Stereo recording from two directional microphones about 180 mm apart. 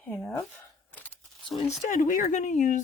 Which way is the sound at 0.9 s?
10° left (ahead or behind).